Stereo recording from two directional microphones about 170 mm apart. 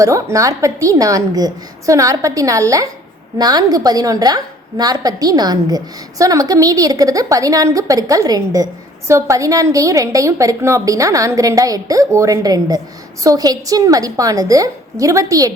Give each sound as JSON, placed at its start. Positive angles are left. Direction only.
{"t": 0.0, "sound": "a woman's voice", "side_deg": -20}